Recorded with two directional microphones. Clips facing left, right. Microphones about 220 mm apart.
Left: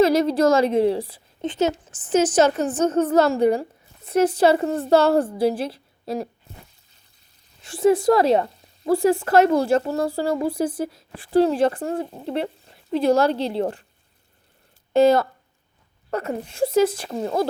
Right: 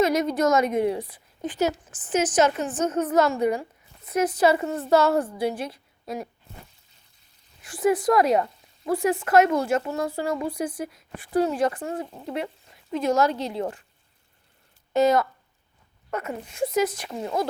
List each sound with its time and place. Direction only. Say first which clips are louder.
0.0 s a woman's voice: left 5 dB; 30° left (ahead or behind)
7.6 s a woman's voice: left 5 dB; 25° left (ahead or behind)
14.9 s a woman's voice: left 4 dB; 30° left (ahead or behind)